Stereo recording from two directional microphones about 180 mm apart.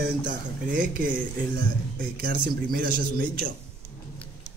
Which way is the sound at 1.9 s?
60° right (ahead or behind).